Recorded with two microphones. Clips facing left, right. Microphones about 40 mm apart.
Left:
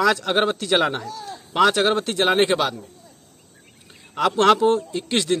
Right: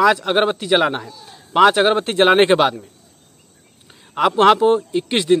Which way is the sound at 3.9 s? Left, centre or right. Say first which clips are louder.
Right 4 dB; centre.